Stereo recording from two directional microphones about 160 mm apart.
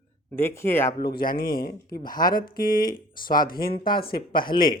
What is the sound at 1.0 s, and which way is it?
Speech, 70° left (ahead or behind).